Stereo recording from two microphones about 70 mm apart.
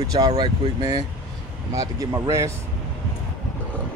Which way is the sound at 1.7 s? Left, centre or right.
Right.